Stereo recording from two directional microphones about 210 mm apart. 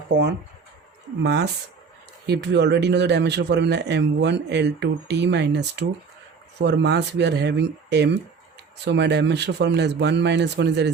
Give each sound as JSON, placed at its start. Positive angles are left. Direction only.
{"t": 0.1, "sound": "speech", "side_deg": -55}